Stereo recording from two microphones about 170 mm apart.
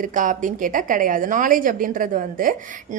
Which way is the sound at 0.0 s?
50° right (ahead or behind).